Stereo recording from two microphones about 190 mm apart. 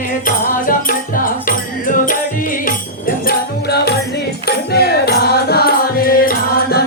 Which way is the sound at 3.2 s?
60° left (ahead or behind).